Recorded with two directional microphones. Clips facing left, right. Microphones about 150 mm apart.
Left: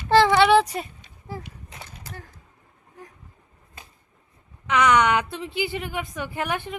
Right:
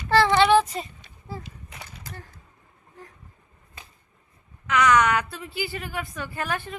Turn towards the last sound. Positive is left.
turn(degrees=15)  # may be behind; listen again after turning